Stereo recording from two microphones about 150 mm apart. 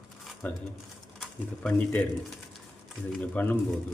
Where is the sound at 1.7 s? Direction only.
10° left (ahead or behind).